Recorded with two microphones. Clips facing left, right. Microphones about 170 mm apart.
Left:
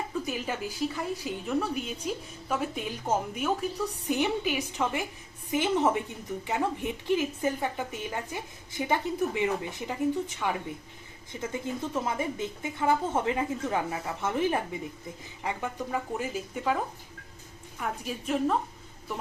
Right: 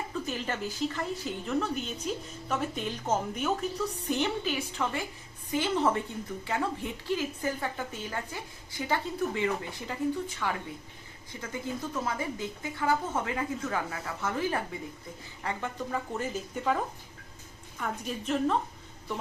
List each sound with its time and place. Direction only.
0.1 s a woman's voice: 10° left (ahead or behind)
15.4 s a woman's voice: 10° left (ahead or behind)
17.7 s a woman's voice: 5° left (ahead or behind)